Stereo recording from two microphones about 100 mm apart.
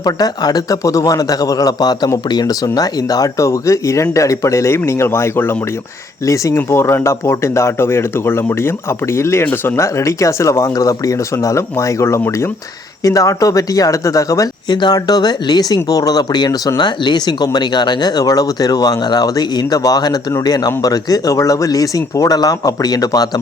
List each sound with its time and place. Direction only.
0.0 s speech: 40° left (ahead or behind)
14.7 s speech: 45° left (ahead or behind)